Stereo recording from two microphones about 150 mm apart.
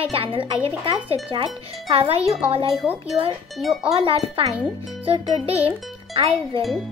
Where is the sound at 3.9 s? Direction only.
35° right (ahead or behind).